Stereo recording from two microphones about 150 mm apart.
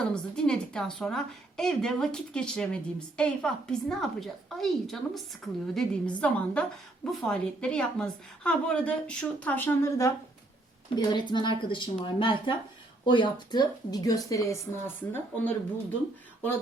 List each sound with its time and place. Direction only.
0.1 s a woman's voice: 5° left (ahead or behind)
10.9 s speech: 30° left (ahead or behind); by 15.5 s 15° left (ahead or behind)